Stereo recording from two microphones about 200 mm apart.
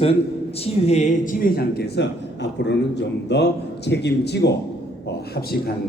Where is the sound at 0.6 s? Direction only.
35° left (ahead or behind); by 4.5 s 55° left (ahead or behind).